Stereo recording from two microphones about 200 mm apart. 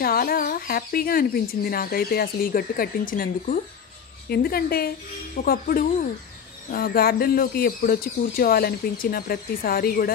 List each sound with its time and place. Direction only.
0.0 s speech: 50° left (ahead or behind)